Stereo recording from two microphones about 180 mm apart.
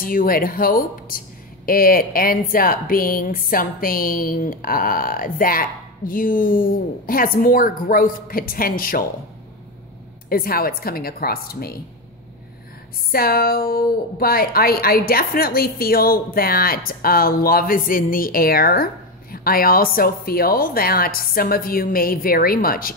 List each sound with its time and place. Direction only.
0.0 s a woman's voice: 50° left (ahead or behind)
10.3 s a woman's voice: 55° left (ahead or behind)
13.1 s a woman's voice: 55° left (ahead or behind)